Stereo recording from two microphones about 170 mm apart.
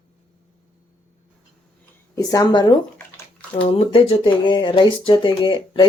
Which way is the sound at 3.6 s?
35° left (ahead or behind).